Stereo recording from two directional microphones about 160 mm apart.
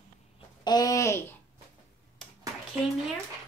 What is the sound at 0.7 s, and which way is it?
Speech, 25° left (ahead or behind).